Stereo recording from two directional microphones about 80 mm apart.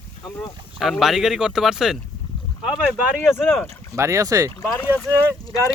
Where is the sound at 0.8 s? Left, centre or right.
Centre.